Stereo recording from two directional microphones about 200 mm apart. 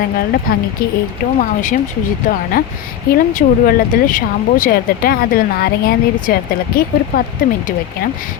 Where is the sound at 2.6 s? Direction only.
45° left (ahead or behind).